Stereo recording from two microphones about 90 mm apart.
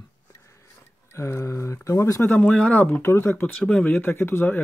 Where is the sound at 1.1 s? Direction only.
30° left (ahead or behind).